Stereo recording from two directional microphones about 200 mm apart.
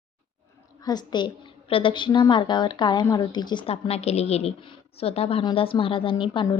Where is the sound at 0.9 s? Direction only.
20° left (ahead or behind).